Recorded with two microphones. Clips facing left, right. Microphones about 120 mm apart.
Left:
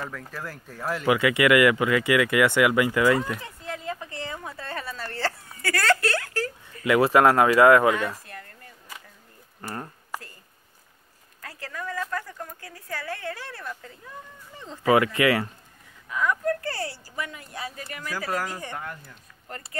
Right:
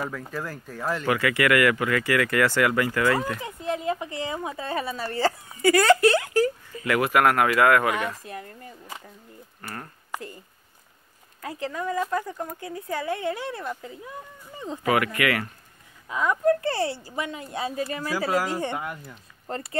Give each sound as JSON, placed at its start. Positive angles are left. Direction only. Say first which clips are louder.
{"t": 0.0, "sound": "speech", "louder": "right 4 dB", "side_deg": -5}
{"t": 1.0, "sound": "speech", "louder": "left 3 dB", "side_deg": 20}
{"t": 3.3, "sound": "a woman's voice", "louder": "right 7 dB", "side_deg": -20}
{"t": 6.9, "sound": "speech", "louder": "left 3 dB", "side_deg": 25}
{"t": 8.3, "sound": "a sound", "louder": "right 6 dB", "side_deg": -20}
{"t": 10.1, "sound": "a sound", "louder": "right 3 dB", "side_deg": -20}
{"t": 11.4, "sound": "speech", "louder": "right 6 dB", "side_deg": -20}
{"t": 14.8, "sound": "speech", "louder": "left 3 dB", "side_deg": 25}
{"t": 16.1, "sound": "speech", "louder": "right 4 dB", "side_deg": -25}